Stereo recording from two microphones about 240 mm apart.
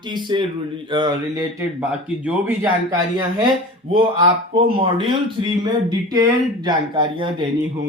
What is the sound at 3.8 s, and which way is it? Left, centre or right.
Speech, right.